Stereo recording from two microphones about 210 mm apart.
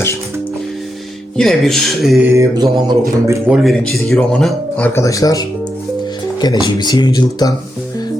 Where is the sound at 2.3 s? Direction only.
15° right (ahead or behind).